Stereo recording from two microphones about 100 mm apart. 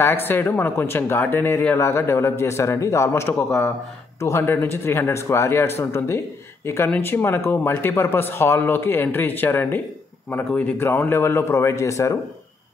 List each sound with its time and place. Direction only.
0.0 s speech: 25° left (ahead or behind)